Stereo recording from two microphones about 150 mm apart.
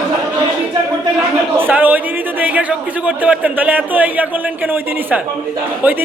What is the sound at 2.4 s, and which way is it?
A man's voice, 10° right (ahead or behind).